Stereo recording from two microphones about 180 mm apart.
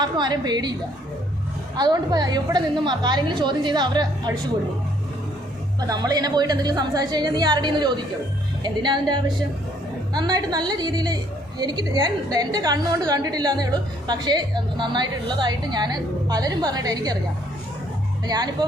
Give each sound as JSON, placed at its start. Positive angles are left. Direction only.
{"t": 0.0, "sound": "a woman's voice", "side_deg": -25}
{"t": 5.9, "sound": "a woman's voice", "side_deg": -20}
{"t": 18.3, "sound": "a woman's voice", "side_deg": -20}